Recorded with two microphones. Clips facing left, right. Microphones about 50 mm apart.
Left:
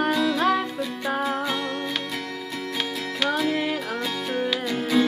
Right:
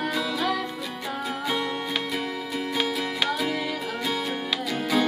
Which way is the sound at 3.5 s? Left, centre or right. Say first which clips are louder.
Left 3 dB; left.